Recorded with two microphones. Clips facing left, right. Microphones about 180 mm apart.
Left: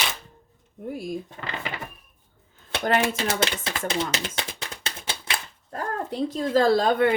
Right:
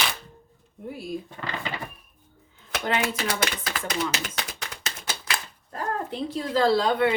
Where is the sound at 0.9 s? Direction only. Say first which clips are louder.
Left 2 dB; 45° left (ahead or behind).